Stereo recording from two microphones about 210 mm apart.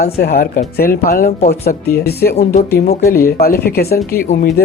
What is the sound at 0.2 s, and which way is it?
Speech, 45° left (ahead or behind).